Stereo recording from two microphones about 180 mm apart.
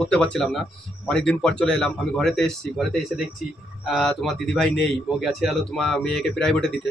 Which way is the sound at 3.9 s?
Centre (ahead or behind).